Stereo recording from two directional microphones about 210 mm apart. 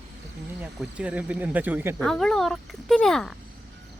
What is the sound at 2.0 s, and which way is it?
Speech, centre (ahead or behind).